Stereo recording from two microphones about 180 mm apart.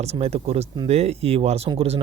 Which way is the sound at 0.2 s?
35° right (ahead or behind).